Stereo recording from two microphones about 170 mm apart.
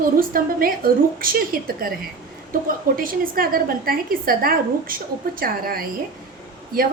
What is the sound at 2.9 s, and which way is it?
A woman's voice, 55° right (ahead or behind).